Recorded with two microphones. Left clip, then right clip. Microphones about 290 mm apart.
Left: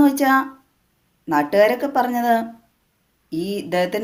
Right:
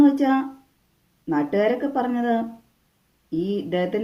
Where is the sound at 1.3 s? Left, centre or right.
Left.